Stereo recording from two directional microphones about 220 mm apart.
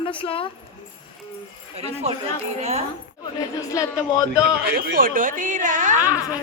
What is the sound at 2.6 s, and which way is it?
Speech, 30° right (ahead or behind).